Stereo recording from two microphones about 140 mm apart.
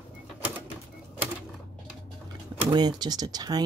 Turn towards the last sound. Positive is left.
turn(degrees=-30)  # may be behind; listen again after turning